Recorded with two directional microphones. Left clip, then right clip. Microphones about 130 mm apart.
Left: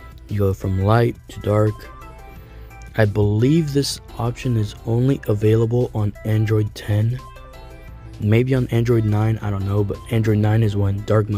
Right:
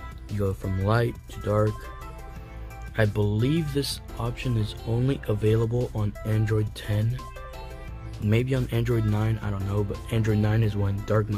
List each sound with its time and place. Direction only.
0.4 s speech: 45° left (ahead or behind)
3.0 s speech: 45° left (ahead or behind)
8.3 s speech: 50° left (ahead or behind)